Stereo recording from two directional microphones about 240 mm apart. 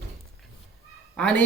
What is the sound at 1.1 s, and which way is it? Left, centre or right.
Speech, centre.